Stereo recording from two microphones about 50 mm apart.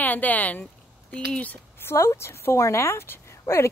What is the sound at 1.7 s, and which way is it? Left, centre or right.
Speech, left.